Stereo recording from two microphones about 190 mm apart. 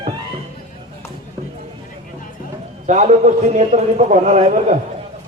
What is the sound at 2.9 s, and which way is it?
A man's voice, 35° right (ahead or behind).